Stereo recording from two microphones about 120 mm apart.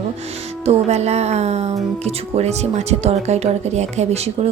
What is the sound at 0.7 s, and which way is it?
Speech, 65° right (ahead or behind).